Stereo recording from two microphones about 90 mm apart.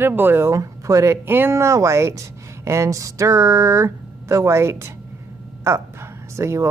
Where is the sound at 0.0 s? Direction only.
25° right (ahead or behind).